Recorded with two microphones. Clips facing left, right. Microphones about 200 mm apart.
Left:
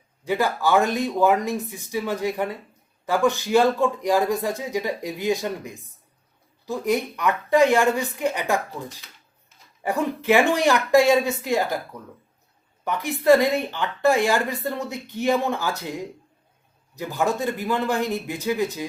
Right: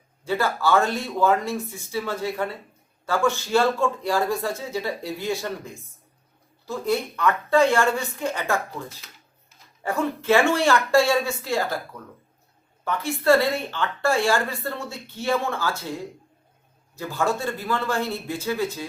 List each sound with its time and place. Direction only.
0.3 s speech: 15° left (ahead or behind)
9.8 s speech: 15° left (ahead or behind)
12.8 s speech: 15° left (ahead or behind)